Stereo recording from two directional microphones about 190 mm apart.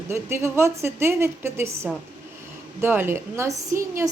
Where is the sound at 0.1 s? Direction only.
15° right (ahead or behind).